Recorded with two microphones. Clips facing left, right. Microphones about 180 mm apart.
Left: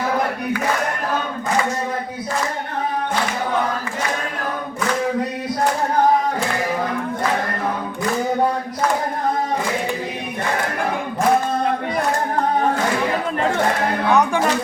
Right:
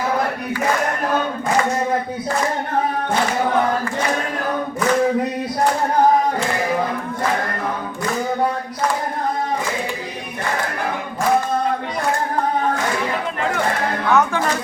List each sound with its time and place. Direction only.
14.1 s music: 15° left (ahead or behind)